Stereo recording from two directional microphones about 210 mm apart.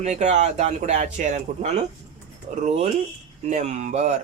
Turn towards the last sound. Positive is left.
turn(degrees=-30)  # may be behind; listen again after turning